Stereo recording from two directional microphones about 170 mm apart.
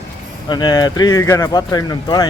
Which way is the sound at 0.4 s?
25° left (ahead or behind).